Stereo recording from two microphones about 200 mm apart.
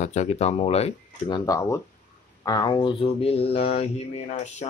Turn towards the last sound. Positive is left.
turn(degrees=30)  # may be behind; listen again after turning